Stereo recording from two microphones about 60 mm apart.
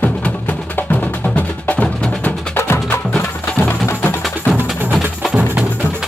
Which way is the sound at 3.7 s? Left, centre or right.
Left.